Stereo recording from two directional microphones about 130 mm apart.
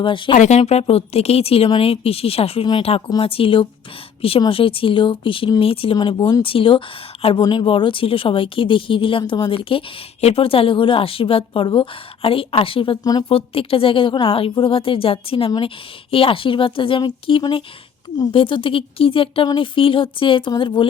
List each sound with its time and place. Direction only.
0.0 s speech: 40° left (ahead or behind)
0.3 s speech: 60° left (ahead or behind); by 13.0 s 45° left (ahead or behind)
13.1 s speech: 30° left (ahead or behind)
13.3 s speech: 45° left (ahead or behind)